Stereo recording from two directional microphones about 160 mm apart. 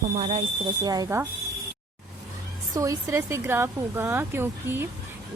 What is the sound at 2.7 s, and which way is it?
Speech, 20° right (ahead or behind).